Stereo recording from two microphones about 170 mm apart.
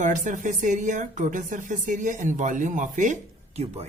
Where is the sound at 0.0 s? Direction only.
50° right (ahead or behind).